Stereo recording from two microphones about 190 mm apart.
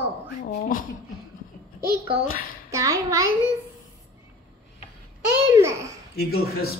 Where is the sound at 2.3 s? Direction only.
50° left (ahead or behind).